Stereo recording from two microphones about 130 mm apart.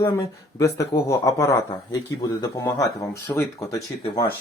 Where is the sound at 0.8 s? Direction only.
25° left (ahead or behind).